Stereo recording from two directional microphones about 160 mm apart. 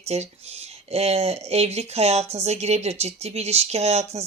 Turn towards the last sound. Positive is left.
turn(degrees=-40)  # may be behind; listen again after turning